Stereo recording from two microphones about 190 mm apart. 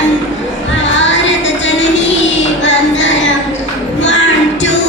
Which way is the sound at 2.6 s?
70° left (ahead or behind).